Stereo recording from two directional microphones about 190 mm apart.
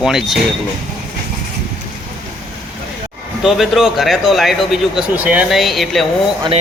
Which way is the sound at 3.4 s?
Centre (ahead or behind).